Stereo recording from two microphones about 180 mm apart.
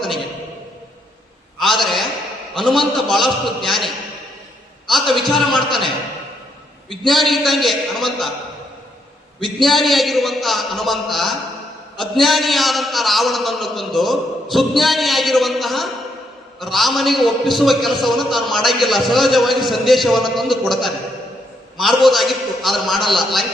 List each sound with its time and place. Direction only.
1.5 s a sound: centre (ahead or behind)
2.6 s a man's voice: centre (ahead or behind)
7.1 s a man's voice: centre (ahead or behind)
9.6 s a man's voice: centre (ahead or behind)